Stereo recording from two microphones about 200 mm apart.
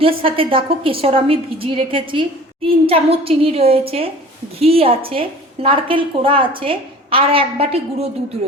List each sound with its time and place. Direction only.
0.2 s a woman's voice: 25° right (ahead or behind)